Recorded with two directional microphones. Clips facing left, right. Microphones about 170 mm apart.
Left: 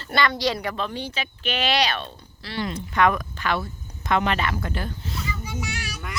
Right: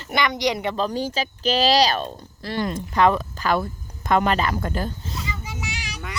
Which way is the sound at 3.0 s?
30° right (ahead or behind).